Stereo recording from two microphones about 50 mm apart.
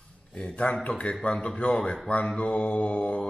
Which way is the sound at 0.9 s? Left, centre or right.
Left.